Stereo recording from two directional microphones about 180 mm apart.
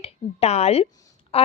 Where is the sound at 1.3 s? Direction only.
35° left (ahead or behind).